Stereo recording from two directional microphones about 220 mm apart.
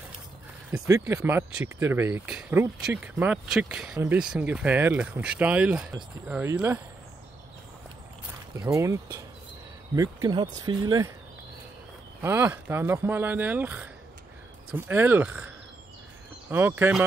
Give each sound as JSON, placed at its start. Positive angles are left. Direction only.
{"t": 0.7, "sound": "speech", "side_deg": -10}
{"t": 8.5, "sound": "speech", "side_deg": -15}
{"t": 12.2, "sound": "speech", "side_deg": -10}
{"t": 16.4, "sound": "speech", "side_deg": -10}